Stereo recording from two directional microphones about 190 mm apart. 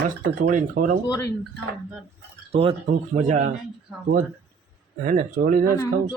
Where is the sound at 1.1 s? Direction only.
15° left (ahead or behind).